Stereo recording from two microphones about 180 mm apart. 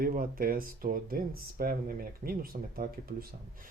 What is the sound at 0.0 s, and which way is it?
Speech, 55° right (ahead or behind).